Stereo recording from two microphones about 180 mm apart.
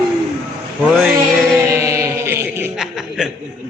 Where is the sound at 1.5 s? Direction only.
15° right (ahead or behind).